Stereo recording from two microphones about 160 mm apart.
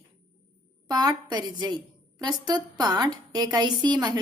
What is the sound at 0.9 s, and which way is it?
A woman's voice, 25° right (ahead or behind).